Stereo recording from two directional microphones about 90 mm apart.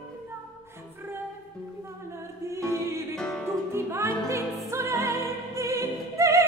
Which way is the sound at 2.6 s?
35° right (ahead or behind).